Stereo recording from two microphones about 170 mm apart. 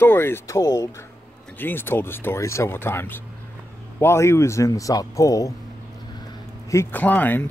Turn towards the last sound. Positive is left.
turn(degrees=10)  # may be behind; listen again after turning